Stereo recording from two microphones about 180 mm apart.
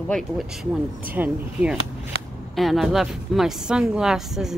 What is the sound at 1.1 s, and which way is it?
A woman's voice, 10° right (ahead or behind).